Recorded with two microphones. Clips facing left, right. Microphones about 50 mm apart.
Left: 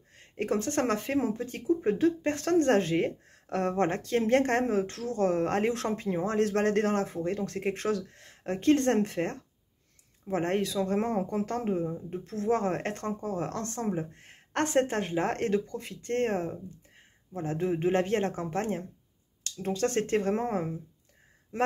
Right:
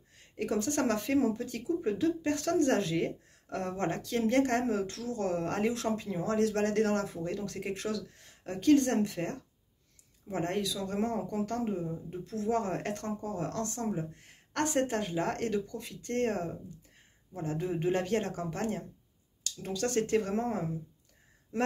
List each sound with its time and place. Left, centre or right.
0.1 s speech: left